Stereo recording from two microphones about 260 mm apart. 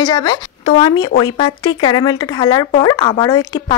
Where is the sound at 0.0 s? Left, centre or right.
Centre.